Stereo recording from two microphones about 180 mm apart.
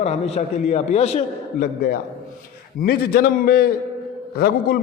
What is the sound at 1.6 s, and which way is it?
A man's voice, 55° left (ahead or behind).